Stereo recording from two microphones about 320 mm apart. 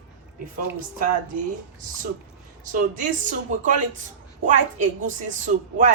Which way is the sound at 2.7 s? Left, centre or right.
Right.